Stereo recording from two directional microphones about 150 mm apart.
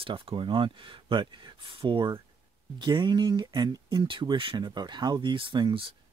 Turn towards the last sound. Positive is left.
turn(degrees=-30)  # may be behind; listen again after turning